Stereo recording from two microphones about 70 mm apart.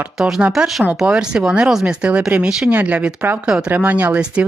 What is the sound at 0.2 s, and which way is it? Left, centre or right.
Speech, centre.